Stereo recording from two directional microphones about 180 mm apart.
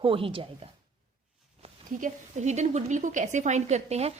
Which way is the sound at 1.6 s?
40° right (ahead or behind).